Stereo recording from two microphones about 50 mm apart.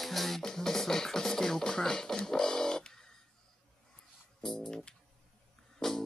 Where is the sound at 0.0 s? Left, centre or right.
Centre.